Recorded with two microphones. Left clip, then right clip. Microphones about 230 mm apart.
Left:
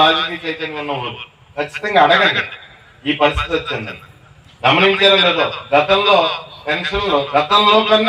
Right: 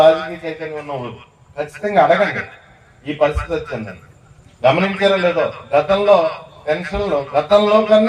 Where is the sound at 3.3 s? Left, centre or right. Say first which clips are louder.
Left 3 dB; centre.